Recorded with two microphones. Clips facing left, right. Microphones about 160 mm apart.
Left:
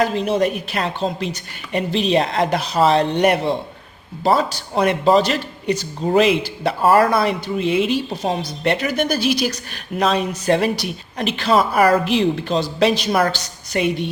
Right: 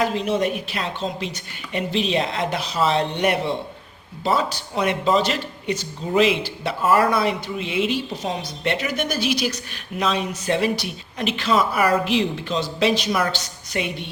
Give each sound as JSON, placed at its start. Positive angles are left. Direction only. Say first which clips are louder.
{"t": 0.0, "sound": "a woman's voice", "louder": "left 3 dB", "side_deg": 40}